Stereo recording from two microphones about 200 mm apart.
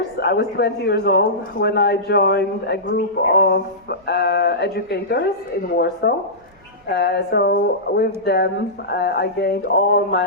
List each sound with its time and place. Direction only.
0.2 s speech: 55° left (ahead or behind)